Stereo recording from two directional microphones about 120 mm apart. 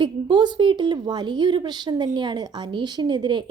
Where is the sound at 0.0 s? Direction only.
40° right (ahead or behind).